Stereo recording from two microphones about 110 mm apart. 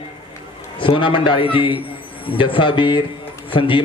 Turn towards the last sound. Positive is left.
turn(degrees=50)  # may be behind; listen again after turning